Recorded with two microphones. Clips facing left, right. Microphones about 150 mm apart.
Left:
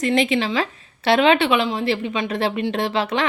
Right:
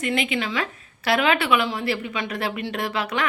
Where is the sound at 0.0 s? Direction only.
35° left (ahead or behind).